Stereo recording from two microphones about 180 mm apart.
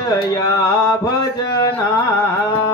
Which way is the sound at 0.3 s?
20° left (ahead or behind).